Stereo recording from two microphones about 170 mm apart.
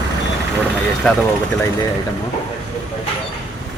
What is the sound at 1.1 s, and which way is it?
Speech, 5° left (ahead or behind).